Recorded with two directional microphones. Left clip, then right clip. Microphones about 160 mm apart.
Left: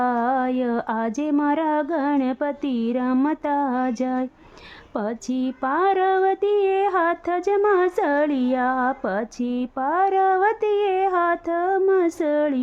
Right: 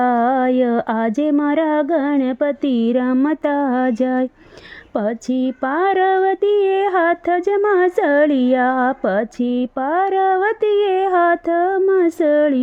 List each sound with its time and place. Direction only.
0.0 s speech: 30° right (ahead or behind)